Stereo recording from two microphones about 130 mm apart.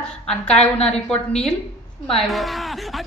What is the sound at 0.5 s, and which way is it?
Speech, 60° left (ahead or behind).